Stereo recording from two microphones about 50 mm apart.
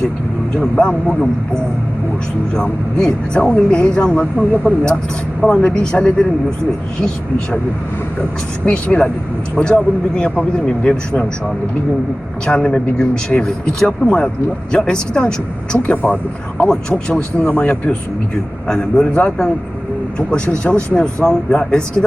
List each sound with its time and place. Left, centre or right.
0.8 s speech: left
2.5 s speech: centre
8.6 s speech: left
12.5 s speech: centre